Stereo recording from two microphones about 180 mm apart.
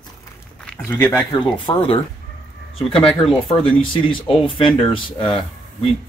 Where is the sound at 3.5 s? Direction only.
30° left (ahead or behind).